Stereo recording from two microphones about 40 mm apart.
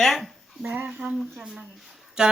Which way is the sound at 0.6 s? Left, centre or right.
Right.